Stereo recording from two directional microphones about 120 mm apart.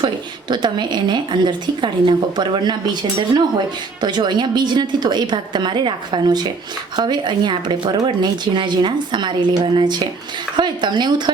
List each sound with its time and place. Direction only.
0.0 s a woman's voice: 40° right (ahead or behind)